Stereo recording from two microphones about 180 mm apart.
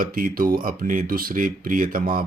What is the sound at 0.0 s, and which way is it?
Speech, 50° right (ahead or behind).